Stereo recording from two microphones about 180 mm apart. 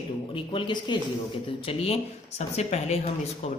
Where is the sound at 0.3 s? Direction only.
25° left (ahead or behind).